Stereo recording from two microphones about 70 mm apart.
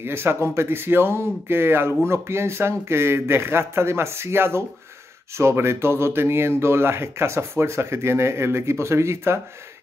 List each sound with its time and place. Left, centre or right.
0.0 s speech: right